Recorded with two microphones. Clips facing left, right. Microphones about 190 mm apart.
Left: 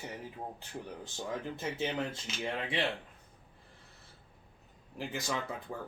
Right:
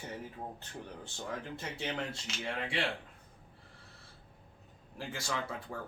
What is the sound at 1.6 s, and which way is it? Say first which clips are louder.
Speech: left 5 dB; 20° left (ahead or behind).